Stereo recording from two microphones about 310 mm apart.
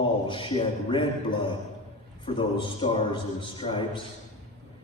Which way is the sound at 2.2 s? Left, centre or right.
Centre.